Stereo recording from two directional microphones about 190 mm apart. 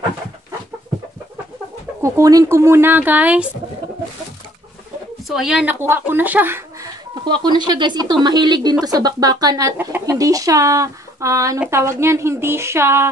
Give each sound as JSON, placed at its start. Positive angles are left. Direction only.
{"t": 2.0, "sound": "speech", "side_deg": -15}
{"t": 5.3, "sound": "speech", "side_deg": -5}
{"t": 7.2, "sound": "speech", "side_deg": -25}